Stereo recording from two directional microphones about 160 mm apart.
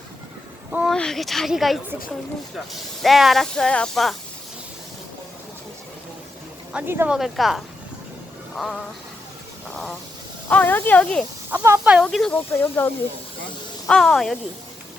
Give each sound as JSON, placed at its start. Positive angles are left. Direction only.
{"t": 0.7, "sound": "a sound", "side_deg": -5}
{"t": 0.9, "sound": "speech", "side_deg": 5}
{"t": 6.7, "sound": "speech", "side_deg": -15}
{"t": 7.2, "sound": "speech", "side_deg": 0}
{"t": 8.5, "sound": "music", "side_deg": 0}
{"t": 10.5, "sound": "speech", "side_deg": 10}
{"t": 11.5, "sound": "speech", "side_deg": -15}
{"t": 11.9, "sound": "speech", "side_deg": 0}